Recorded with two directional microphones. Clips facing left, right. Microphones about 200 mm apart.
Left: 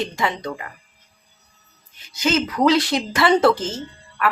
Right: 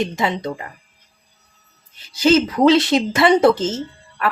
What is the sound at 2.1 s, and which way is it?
Speech, 30° right (ahead or behind).